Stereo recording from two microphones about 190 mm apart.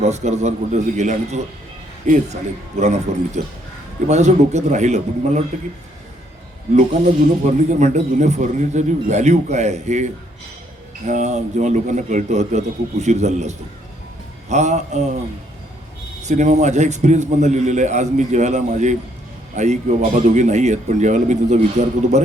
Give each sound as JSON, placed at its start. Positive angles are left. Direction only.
{"t": 0.0, "sound": "a man's voice", "side_deg": -35}
{"t": 7.4, "sound": "a man's voice", "side_deg": -40}
{"t": 16.2, "sound": "a man's voice", "side_deg": -40}